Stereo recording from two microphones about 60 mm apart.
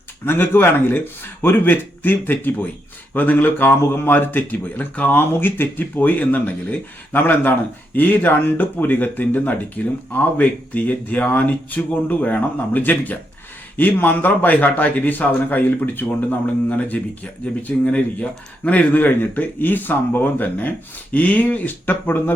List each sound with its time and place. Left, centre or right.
0.3 s speech: left